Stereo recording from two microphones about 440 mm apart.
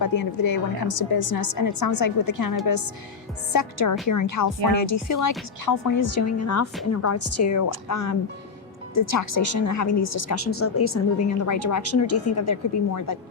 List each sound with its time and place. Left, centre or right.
0.3 s a woman's voice: left